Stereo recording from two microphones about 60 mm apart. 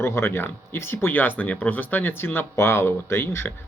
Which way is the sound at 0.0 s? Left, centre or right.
Left.